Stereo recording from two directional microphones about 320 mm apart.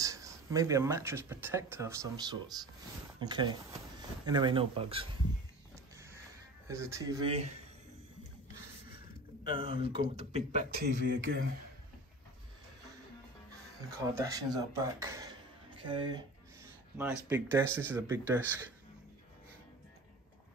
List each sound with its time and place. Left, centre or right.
0.0 s speech: centre
6.7 s speech: centre
9.4 s speech: centre; by 11.3 s right
14.1 s speech: centre